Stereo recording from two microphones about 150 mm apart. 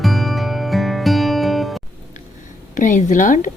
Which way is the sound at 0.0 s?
Centre (ahead or behind).